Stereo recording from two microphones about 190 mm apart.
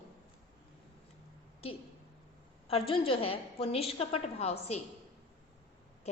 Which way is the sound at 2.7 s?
30° left (ahead or behind).